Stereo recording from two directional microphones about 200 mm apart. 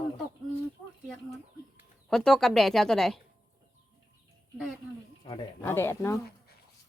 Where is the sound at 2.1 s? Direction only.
5° left (ahead or behind).